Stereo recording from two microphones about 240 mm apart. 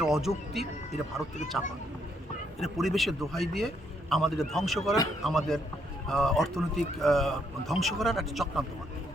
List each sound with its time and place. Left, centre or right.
0.0 s a man's voice: centre
2.6 s a man's voice: centre